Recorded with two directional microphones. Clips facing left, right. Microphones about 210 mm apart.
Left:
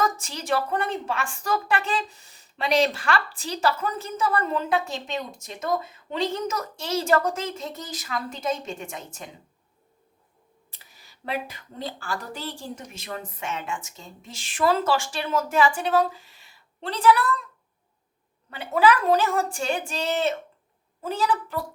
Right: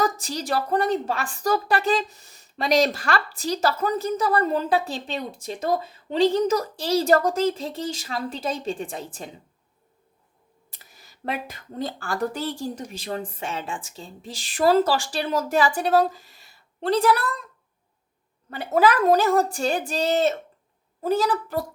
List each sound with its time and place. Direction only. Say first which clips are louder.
0.0 s a woman's voice: right 2 dB; 35° right (ahead or behind)
10.7 s a woman's voice: right 4 dB; 45° right (ahead or behind)
18.5 s a woman's voice: right 1 dB; 40° right (ahead or behind)